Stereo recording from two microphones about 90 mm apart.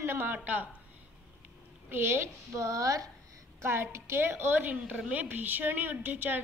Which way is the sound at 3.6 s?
25° right (ahead or behind).